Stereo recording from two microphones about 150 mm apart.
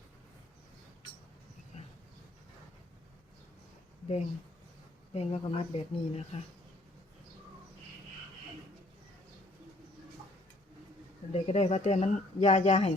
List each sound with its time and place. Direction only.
1.7 s a sound: 45° left (ahead or behind)
5.1 s speech: 45° left (ahead or behind)
11.3 s speech: 45° left (ahead or behind)